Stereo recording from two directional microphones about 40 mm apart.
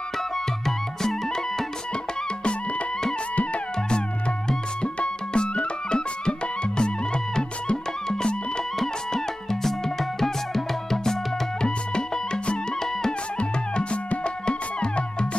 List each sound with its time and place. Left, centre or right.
0.7 s music: centre
4.5 s music: left
8.7 s music: centre
11.6 s music: left